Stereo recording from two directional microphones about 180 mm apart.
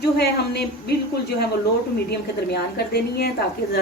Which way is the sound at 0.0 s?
65° left (ahead or behind).